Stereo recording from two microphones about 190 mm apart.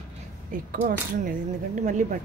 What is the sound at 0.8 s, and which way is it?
Speech, 45° right (ahead or behind).